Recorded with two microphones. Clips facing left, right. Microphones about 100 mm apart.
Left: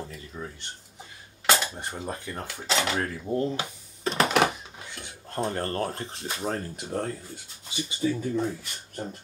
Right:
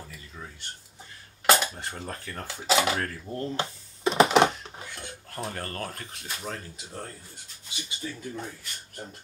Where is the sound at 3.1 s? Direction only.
15° left (ahead or behind).